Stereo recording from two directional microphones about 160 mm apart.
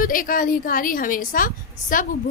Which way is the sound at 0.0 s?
60° left (ahead or behind).